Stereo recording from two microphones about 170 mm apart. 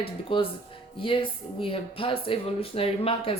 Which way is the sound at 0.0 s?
30° left (ahead or behind).